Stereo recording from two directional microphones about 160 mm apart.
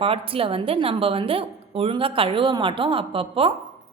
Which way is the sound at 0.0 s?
35° right (ahead or behind).